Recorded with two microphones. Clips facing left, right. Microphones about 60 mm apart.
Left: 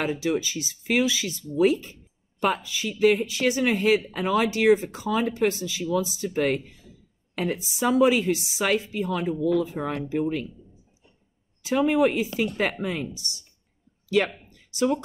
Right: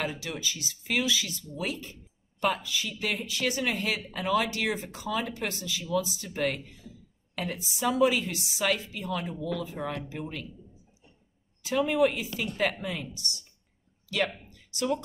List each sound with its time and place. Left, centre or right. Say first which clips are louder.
0.1 s speech: left 10 dB; left
11.6 s speech: left 4 dB; left